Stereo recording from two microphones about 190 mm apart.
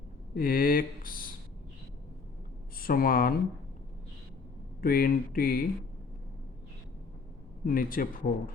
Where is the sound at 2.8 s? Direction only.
50° left (ahead or behind).